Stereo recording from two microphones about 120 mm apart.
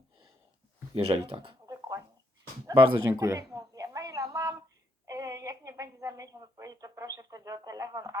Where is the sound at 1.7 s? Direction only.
25° right (ahead or behind).